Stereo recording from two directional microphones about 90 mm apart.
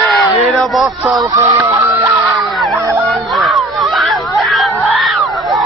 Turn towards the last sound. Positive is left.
turn(degrees=0)  # may be behind; listen again after turning